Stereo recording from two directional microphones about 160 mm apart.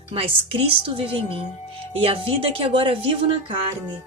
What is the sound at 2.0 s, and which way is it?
Speech, 35° right (ahead or behind).